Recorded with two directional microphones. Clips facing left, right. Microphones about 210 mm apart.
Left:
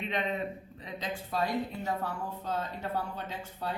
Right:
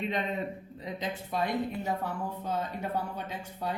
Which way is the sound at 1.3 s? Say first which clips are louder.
Right 1 dB; 15° right (ahead or behind).